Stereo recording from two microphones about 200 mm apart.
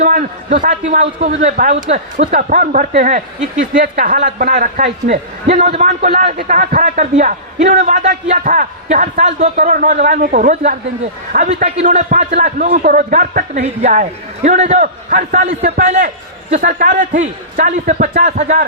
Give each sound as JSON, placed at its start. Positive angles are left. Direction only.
{"t": 0.0, "sound": "a man's voice", "side_deg": -40}